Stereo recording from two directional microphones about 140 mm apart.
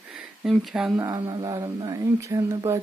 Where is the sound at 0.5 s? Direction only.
Centre (ahead or behind).